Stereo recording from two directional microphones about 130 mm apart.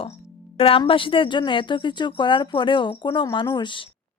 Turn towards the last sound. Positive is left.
turn(degrees=35)  # may be behind; listen again after turning